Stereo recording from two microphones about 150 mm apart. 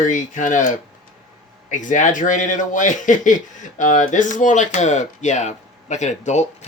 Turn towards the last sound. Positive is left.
turn(degrees=50)  # may be behind; listen again after turning